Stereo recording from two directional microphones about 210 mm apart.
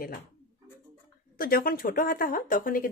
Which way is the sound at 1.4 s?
45° left (ahead or behind).